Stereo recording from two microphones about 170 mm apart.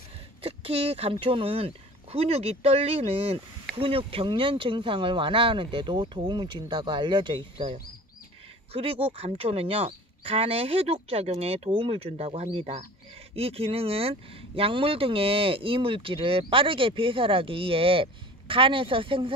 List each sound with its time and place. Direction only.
0.4 s a sound: 35° right (ahead or behind)
1.2 s speech: 35° right (ahead or behind)
8.7 s speech: 35° right (ahead or behind)